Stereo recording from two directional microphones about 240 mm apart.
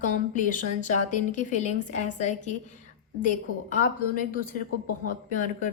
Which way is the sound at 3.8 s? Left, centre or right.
Left.